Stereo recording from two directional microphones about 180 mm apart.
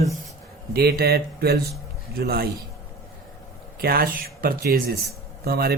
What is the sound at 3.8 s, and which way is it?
Speech, 55° right (ahead or behind).